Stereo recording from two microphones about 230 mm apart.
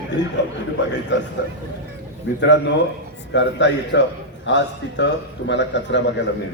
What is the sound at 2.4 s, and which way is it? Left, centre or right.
A man's voice, left.